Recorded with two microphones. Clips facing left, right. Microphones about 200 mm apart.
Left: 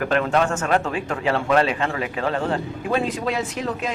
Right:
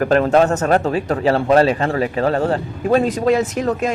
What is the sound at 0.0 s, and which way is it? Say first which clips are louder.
A man's voice: right 6 dB; 40° right (ahead or behind).